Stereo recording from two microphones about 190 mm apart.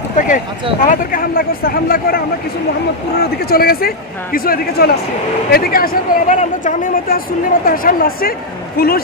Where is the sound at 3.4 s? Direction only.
50° left (ahead or behind).